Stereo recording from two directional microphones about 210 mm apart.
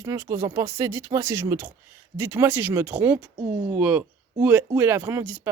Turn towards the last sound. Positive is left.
turn(degrees=-5)  # may be behind; listen again after turning